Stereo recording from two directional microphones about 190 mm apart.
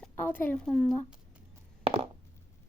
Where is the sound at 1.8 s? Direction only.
30° right (ahead or behind).